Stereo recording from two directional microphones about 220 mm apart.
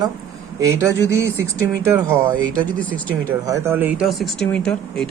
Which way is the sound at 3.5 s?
10° right (ahead or behind).